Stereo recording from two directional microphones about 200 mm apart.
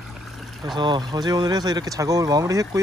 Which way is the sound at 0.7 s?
20° right (ahead or behind).